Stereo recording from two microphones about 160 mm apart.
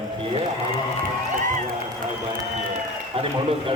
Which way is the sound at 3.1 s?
35° right (ahead or behind).